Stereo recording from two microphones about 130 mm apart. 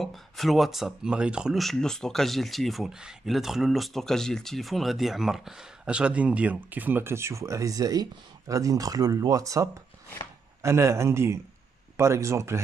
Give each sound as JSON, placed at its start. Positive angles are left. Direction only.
{"t": 0.0, "sound": "a man's voice", "side_deg": 0}